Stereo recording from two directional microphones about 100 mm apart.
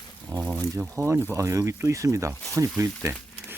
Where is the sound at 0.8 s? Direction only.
25° right (ahead or behind).